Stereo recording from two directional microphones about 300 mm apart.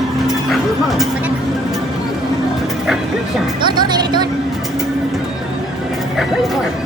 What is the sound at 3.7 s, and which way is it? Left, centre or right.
Music, centre.